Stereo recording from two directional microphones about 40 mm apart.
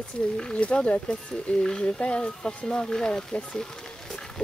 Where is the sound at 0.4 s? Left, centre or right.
Left.